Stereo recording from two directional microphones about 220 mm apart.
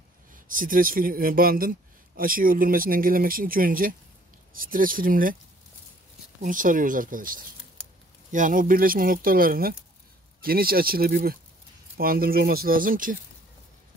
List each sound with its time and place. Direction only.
0.3 s speech: 40° right (ahead or behind)
6.4 s speech: 35° right (ahead or behind)